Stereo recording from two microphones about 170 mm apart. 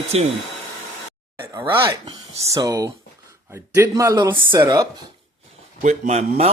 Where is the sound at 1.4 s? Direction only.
15° right (ahead or behind).